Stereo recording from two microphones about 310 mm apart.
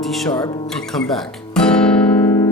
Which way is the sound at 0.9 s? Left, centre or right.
Centre.